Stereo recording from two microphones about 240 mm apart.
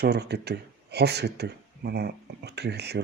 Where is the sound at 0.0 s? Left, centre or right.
Right.